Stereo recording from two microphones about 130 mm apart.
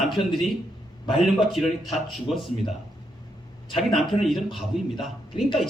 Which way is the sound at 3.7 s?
Centre (ahead or behind).